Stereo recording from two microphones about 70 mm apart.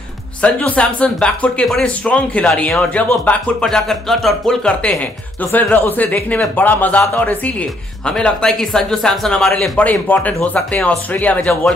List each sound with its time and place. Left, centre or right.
0.4 s speech: centre
3.6 s speech: centre
5.4 s speech: left
8.0 s speech: centre
9.8 s speech: left